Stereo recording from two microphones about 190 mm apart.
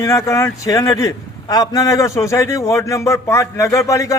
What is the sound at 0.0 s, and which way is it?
A man's voice, 15° left (ahead or behind).